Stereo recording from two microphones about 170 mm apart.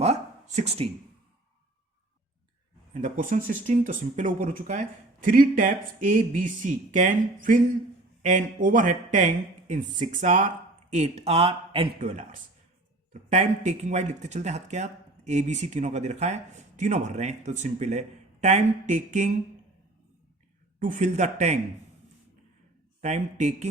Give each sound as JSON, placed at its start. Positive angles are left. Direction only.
{"t": 0.0, "sound": "a sound", "side_deg": -40}
{"t": 2.9, "sound": "speech", "side_deg": -50}
{"t": 10.9, "sound": "speech", "side_deg": -40}
{"t": 11.9, "sound": "speech", "side_deg": -45}
{"t": 13.3, "sound": "speech", "side_deg": -45}
{"t": 20.7, "sound": "speech", "side_deg": -50}
{"t": 23.0, "sound": "speech", "side_deg": -45}